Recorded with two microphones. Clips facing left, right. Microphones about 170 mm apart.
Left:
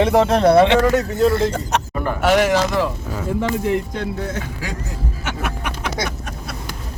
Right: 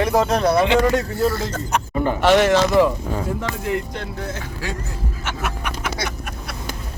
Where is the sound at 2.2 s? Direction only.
5° left (ahead or behind).